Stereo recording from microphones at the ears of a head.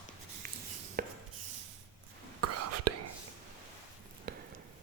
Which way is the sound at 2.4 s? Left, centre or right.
Right.